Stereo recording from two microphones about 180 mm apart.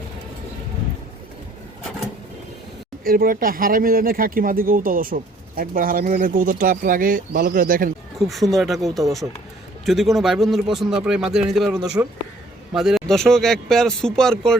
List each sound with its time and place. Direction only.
3.0 s speech: 55° right (ahead or behind)
8.2 s a man's voice: centre (ahead or behind)